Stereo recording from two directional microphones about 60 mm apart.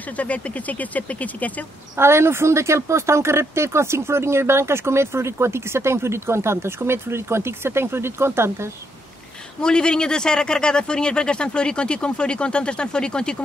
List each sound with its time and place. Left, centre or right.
0.0 s speech: left
2.0 s speech: right
9.6 s speech: centre